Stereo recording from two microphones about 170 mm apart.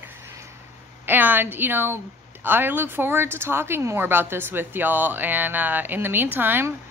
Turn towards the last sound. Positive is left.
turn(degrees=-10)  # may be behind; listen again after turning